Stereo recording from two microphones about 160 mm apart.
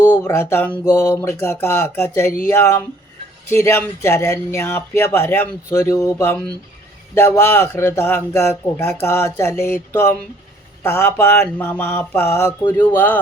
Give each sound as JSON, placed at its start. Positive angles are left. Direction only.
{"t": 0.0, "sound": "speech", "side_deg": 15}